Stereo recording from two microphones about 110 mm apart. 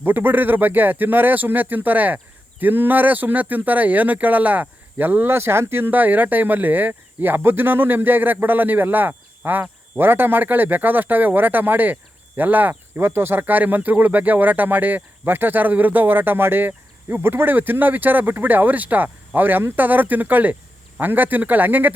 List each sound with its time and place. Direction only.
0.0 s speech: 20° right (ahead or behind)